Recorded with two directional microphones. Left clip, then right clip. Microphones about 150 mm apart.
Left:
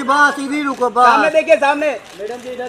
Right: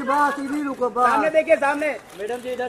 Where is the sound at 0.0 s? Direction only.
55° left (ahead or behind).